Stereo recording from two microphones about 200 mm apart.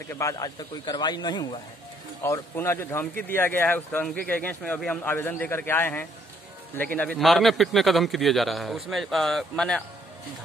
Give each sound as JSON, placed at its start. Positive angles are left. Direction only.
{"t": 0.1, "sound": "a man's voice", "side_deg": 15}